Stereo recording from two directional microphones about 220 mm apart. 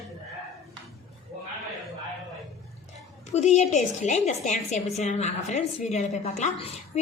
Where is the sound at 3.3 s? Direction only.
30° left (ahead or behind).